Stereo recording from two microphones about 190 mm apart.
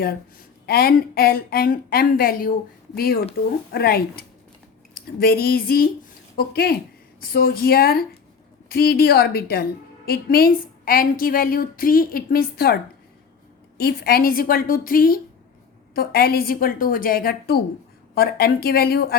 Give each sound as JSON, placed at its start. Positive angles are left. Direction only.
{"t": 0.6, "sound": "a woman's voice", "side_deg": 55}